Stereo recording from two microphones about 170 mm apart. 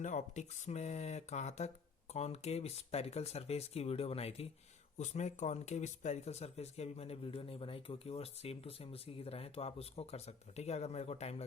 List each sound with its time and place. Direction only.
0.0 s speech: 45° left (ahead or behind)